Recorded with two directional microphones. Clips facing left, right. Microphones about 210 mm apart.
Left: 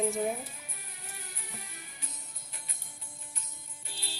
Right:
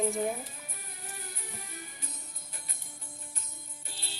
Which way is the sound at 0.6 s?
45° right (ahead or behind).